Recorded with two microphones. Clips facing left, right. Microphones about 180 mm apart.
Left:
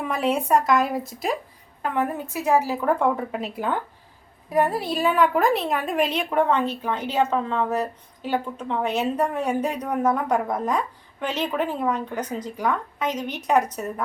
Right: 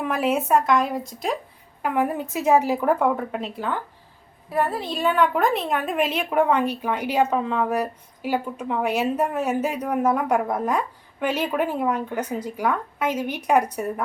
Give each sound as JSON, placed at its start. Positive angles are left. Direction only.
{"t": 0.0, "sound": "speech", "side_deg": -5}
{"t": 1.8, "sound": "a woman's voice", "side_deg": -10}
{"t": 2.8, "sound": "speech", "side_deg": 0}
{"t": 4.4, "sound": "a woman's voice", "side_deg": 15}